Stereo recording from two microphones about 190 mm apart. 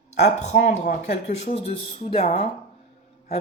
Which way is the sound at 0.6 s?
40° left (ahead or behind).